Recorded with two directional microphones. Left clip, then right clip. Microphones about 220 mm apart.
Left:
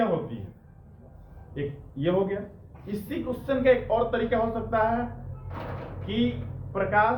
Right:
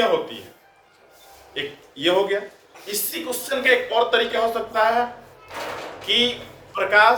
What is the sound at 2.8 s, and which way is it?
Speech, 20° right (ahead or behind).